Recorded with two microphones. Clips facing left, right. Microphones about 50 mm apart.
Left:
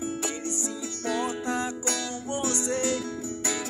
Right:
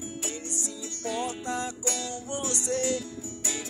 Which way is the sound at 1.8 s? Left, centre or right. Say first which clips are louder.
Left 2 dB; left.